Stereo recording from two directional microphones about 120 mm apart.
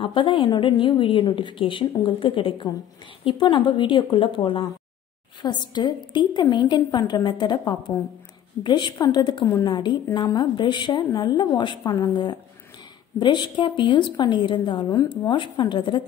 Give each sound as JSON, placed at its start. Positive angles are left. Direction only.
{"t": 0.0, "sound": "a woman's voice", "side_deg": 45}
{"t": 14.9, "sound": "speech", "side_deg": 30}
{"t": 15.3, "sound": "a woman's voice", "side_deg": 40}